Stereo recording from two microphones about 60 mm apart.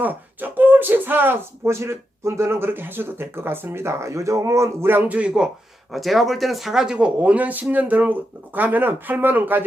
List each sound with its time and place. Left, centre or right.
0.0 s speech: right
5.0 s speech: right
5.9 s speech: centre; by 9.6 s right